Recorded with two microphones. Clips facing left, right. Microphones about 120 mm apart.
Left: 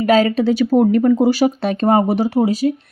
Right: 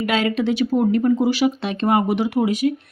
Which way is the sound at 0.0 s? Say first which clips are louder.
Left 6 dB; 40° left (ahead or behind).